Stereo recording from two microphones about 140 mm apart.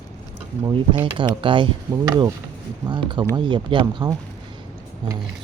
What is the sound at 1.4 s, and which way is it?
Speech, 35° right (ahead or behind).